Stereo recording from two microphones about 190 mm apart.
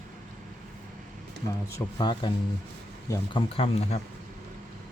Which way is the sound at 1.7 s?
25° left (ahead or behind).